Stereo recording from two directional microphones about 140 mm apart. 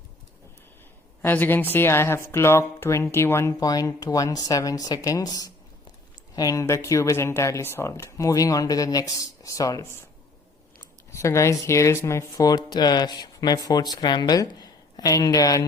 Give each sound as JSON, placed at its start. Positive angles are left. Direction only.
{"t": 1.2, "sound": "speech", "side_deg": 15}
{"t": 11.1, "sound": "a woman's voice", "side_deg": 20}